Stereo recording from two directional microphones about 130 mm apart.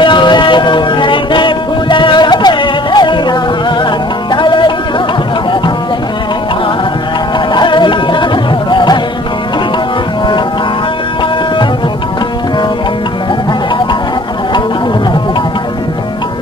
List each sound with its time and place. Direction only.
0.0 s music: 35° left (ahead or behind)
7.5 s music: 40° left (ahead or behind)